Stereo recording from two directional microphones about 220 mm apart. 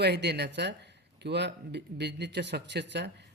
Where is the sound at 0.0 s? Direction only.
50° right (ahead or behind).